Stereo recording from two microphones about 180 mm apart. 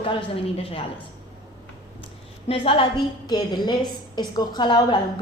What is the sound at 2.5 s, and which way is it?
A woman's voice, 30° left (ahead or behind).